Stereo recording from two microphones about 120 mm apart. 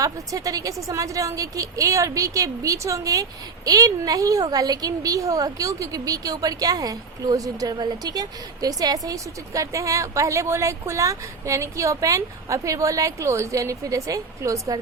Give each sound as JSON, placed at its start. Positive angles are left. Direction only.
{"t": 0.0, "sound": "a woman's voice", "side_deg": -30}